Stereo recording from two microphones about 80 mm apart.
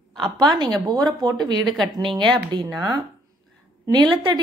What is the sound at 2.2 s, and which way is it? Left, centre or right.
Speech, right.